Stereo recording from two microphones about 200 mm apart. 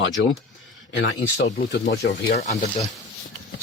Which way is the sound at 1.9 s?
60° left (ahead or behind).